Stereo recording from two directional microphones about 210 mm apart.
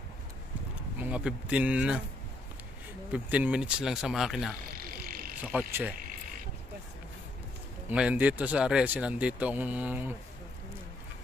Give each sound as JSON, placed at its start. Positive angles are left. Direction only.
{"t": 0.9, "sound": "speech", "side_deg": -5}
{"t": 3.1, "sound": "speech", "side_deg": -5}
{"t": 4.7, "sound": "a sound", "side_deg": -45}
{"t": 5.4, "sound": "speech", "side_deg": -5}
{"t": 7.9, "sound": "speech", "side_deg": -5}